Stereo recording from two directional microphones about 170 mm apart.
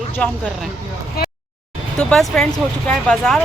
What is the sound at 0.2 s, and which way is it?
Speech, 5° left (ahead or behind).